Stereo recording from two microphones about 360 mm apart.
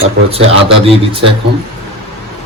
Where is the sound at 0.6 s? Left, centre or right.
Centre.